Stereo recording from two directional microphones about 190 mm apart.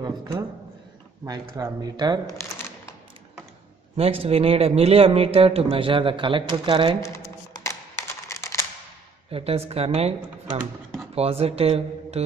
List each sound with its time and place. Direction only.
0.0 s a man's voice: 20° right (ahead or behind)
1.6 s speech: 20° right (ahead or behind)
3.9 s speech: 30° right (ahead or behind)
7.5 s a sound: 15° left (ahead or behind)
9.3 s speech: 30° right (ahead or behind)
11.1 s speech: 30° right (ahead or behind)